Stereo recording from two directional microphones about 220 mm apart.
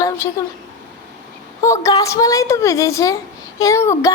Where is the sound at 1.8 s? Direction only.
15° left (ahead or behind).